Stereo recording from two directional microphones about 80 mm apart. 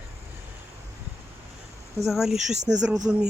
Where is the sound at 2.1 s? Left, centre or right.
Centre.